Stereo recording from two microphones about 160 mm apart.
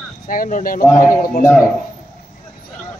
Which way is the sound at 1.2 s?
60° left (ahead or behind).